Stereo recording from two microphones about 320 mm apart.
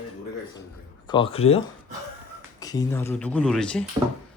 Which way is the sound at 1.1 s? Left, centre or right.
Centre.